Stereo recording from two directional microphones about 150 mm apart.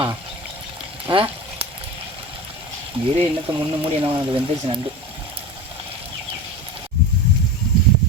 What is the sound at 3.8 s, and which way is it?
Speech, 35° right (ahead or behind).